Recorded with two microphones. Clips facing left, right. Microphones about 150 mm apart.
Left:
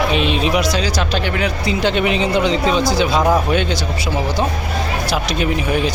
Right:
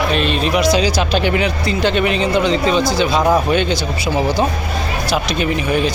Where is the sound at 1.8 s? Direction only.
10° left (ahead or behind).